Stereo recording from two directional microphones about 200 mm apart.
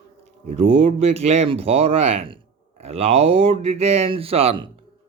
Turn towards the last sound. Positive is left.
turn(degrees=-30)  # may be behind; listen again after turning